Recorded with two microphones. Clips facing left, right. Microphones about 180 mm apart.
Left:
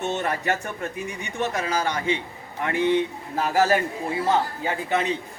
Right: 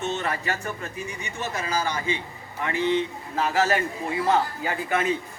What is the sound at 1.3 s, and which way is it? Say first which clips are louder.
Speech: left 3 dB; 55° left (ahead or behind).